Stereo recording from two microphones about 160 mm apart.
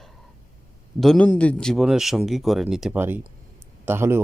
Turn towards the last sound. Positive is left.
turn(degrees=-15)  # may be behind; listen again after turning